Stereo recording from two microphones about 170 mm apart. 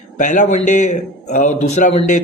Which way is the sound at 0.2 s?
50° left (ahead or behind).